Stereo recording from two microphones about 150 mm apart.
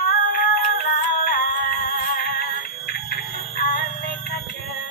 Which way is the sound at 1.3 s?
75° left (ahead or behind).